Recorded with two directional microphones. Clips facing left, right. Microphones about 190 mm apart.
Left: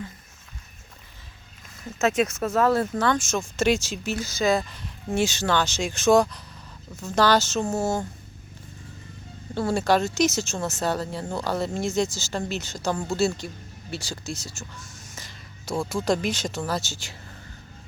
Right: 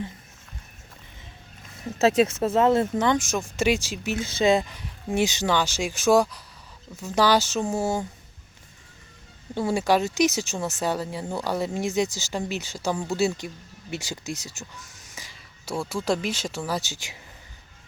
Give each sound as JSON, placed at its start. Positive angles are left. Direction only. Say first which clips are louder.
{"t": 2.0, "sound": "speech", "louder": "right 3 dB", "side_deg": -30}
{"t": 4.3, "sound": "speech", "louder": "right 2 dB", "side_deg": -25}
{"t": 4.7, "sound": "speech", "louder": "even", "side_deg": -15}
{"t": 9.6, "sound": "speech", "louder": "even", "side_deg": -15}